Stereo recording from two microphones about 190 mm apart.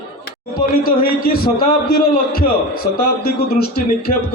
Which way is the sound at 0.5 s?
50° left (ahead or behind).